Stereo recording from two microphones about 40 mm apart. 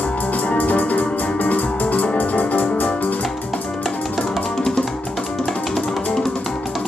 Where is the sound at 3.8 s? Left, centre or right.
Centre.